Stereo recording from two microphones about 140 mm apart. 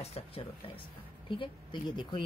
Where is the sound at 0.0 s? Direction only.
45° left (ahead or behind).